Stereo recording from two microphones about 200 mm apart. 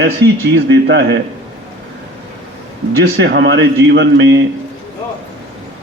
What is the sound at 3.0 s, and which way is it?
Speech, 55° right (ahead or behind).